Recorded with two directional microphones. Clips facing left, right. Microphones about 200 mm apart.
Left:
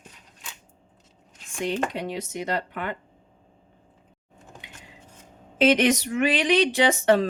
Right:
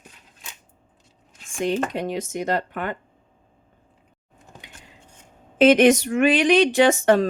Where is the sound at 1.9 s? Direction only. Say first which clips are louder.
Right 4 dB; 50° right (ahead or behind).